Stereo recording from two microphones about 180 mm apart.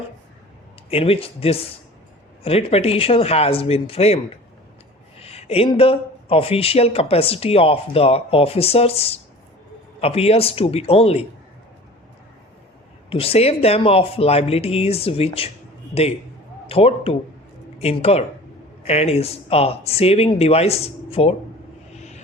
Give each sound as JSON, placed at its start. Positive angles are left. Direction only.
{"t": 0.9, "sound": "speech", "side_deg": 30}
{"t": 5.2, "sound": "speech", "side_deg": 35}
{"t": 13.1, "sound": "speech", "side_deg": 30}
{"t": 16.6, "sound": "speech", "side_deg": 30}
{"t": 21.9, "sound": "music", "side_deg": 40}